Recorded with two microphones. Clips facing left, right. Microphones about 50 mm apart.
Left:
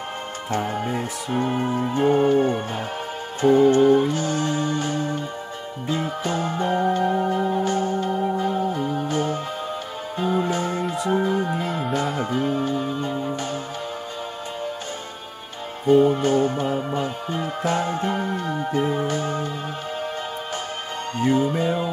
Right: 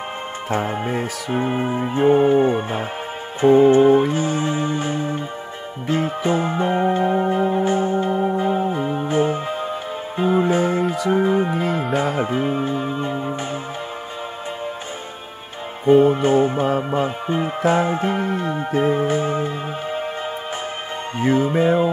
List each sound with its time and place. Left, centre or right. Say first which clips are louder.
0.5 s music: right 2 dB; right
11.5 s music: right 4 dB; centre
12.2 s music: right 2 dB; right
15.8 s music: right 3 dB; right
21.2 s music: right 3 dB; right